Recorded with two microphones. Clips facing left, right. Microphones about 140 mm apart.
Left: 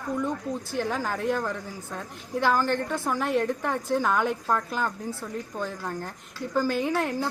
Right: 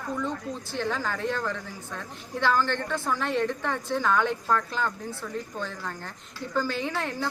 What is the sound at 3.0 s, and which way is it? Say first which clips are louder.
Speech: right 1 dB; 10° left (ahead or behind).